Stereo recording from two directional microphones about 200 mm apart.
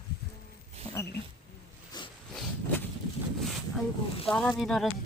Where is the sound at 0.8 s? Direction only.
30° right (ahead or behind).